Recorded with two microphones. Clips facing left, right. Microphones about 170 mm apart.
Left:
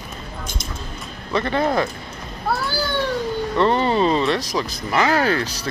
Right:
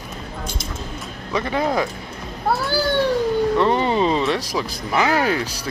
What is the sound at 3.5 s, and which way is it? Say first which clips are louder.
Speech: even; 10° right (ahead or behind).